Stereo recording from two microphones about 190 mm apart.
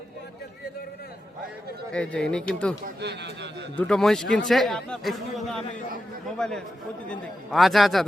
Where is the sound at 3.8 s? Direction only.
5° left (ahead or behind).